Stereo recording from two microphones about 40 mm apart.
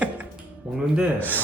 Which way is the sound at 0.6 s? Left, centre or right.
Right.